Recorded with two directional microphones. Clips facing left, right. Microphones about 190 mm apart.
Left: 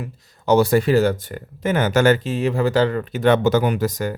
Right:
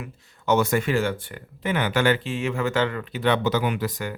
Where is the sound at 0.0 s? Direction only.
35° left (ahead or behind).